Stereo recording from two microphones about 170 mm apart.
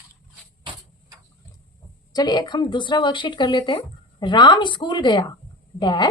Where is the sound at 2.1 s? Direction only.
25° left (ahead or behind).